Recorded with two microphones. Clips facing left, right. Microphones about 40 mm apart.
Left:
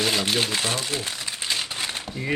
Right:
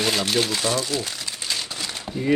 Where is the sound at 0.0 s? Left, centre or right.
Centre.